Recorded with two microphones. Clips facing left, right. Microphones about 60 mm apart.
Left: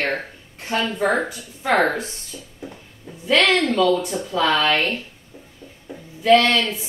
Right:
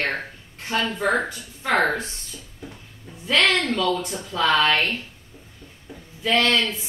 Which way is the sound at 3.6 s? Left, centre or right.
Centre.